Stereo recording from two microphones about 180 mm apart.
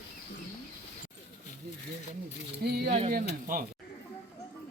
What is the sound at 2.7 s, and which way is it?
Speech, 60° right (ahead or behind).